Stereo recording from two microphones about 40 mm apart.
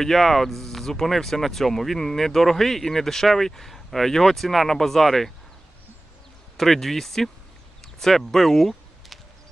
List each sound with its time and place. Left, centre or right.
0.0 s speech: centre
6.5 s speech: centre
7.8 s a sound: centre